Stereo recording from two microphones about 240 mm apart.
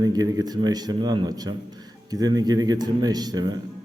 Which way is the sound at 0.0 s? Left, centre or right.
Centre.